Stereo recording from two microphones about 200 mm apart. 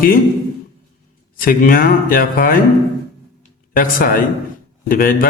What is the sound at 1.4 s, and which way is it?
A man's voice, 45° left (ahead or behind).